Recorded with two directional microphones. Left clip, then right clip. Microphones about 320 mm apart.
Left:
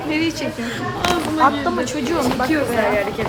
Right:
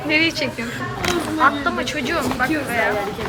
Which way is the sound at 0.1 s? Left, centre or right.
Centre.